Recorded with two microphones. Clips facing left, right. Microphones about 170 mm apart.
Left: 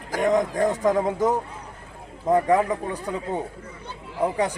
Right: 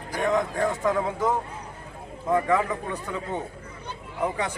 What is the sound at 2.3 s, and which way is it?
Speech, 35° left (ahead or behind).